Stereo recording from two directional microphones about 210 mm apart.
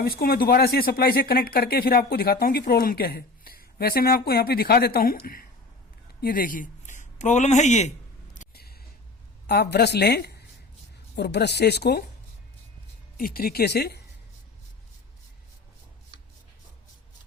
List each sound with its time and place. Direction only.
0.0 s a man's voice: 45° left (ahead or behind)
8.4 s a sound: 45° left (ahead or behind)
9.5 s speech: 50° left (ahead or behind)
13.1 s speech: 45° left (ahead or behind)